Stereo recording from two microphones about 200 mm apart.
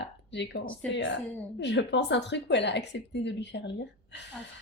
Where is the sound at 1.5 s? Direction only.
65° left (ahead or behind).